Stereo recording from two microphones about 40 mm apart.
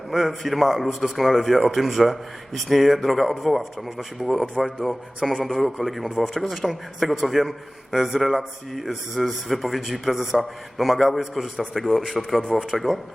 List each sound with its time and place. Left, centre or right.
0.1 s speech: centre
4.6 s speech: centre
5.2 s speech: centre
12.2 s speech: centre